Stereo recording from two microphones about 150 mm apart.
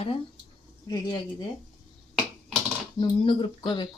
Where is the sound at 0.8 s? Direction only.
25° left (ahead or behind).